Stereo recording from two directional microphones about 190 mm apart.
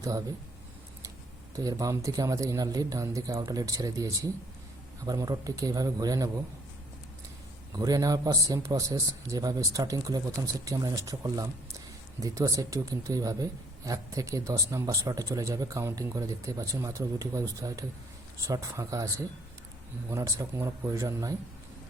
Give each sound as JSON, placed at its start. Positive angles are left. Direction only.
{"t": 0.0, "sound": "speech", "side_deg": -20}
{"t": 1.5, "sound": "a man's voice", "side_deg": -15}
{"t": 7.7, "sound": "a man's voice", "side_deg": -20}